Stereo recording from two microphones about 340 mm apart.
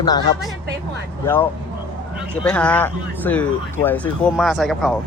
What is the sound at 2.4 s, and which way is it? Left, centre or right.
Speech, centre.